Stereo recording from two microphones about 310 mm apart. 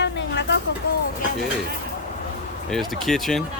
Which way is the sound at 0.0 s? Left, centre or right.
Left.